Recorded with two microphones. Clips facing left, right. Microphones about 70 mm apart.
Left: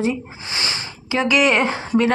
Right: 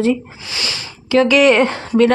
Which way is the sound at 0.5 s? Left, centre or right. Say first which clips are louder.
Even; left.